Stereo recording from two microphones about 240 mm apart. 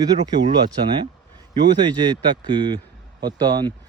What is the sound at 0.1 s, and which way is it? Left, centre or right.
Speech, right.